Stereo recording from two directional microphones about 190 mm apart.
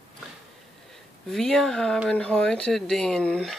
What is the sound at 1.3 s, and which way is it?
Speech, centre (ahead or behind).